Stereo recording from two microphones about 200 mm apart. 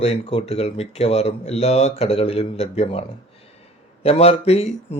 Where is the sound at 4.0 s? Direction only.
30° left (ahead or behind).